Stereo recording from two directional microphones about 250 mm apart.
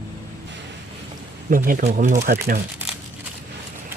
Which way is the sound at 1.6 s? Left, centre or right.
Right.